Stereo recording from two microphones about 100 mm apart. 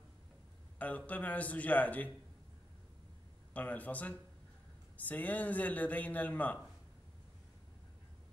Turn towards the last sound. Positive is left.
turn(degrees=15)  # may be behind; listen again after turning